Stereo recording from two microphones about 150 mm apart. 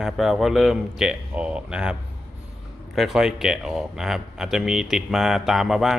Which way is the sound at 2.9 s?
Centre (ahead or behind).